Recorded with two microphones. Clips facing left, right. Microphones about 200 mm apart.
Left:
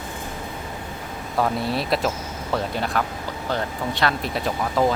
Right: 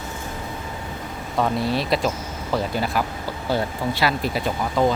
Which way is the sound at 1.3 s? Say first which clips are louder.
Right 1 dB; centre (ahead or behind).